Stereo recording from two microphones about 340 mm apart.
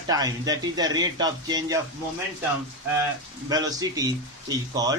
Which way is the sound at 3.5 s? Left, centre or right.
Centre.